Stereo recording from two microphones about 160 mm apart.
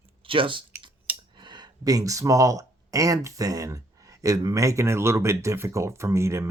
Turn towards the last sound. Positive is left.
turn(degrees=-15)  # may be behind; listen again after turning